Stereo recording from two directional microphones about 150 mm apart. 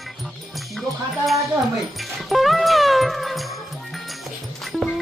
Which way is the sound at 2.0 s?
Centre (ahead or behind).